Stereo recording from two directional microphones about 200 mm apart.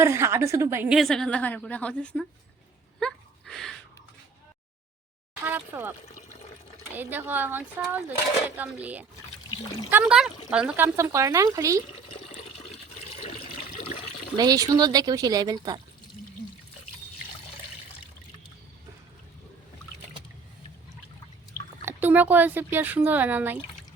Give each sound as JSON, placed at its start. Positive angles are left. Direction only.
{"t": 0.0, "sound": "a woman's voice", "side_deg": -15}
{"t": 3.0, "sound": "a sound", "side_deg": 0}
{"t": 5.5, "sound": "speech", "side_deg": -10}
{"t": 6.9, "sound": "speech", "side_deg": -10}
{"t": 14.3, "sound": "speech", "side_deg": -20}
{"t": 21.8, "sound": "speech", "side_deg": -10}